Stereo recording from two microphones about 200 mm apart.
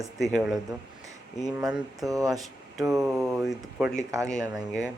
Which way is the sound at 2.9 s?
Centre (ahead or behind).